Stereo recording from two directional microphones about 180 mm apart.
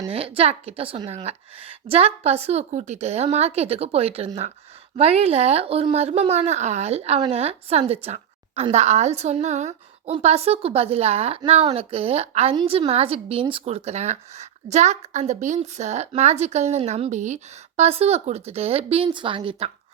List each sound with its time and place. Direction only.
0.3 s speech: 35° right (ahead or behind)